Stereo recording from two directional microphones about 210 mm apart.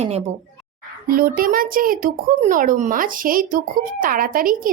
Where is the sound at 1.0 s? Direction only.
45° right (ahead or behind).